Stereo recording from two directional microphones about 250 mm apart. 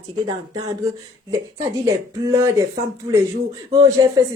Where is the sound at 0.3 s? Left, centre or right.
Centre.